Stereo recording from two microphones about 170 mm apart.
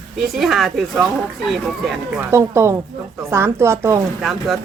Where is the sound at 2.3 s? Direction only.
15° right (ahead or behind).